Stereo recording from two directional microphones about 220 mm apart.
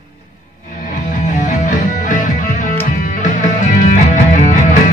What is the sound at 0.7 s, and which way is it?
Music, 35° left (ahead or behind).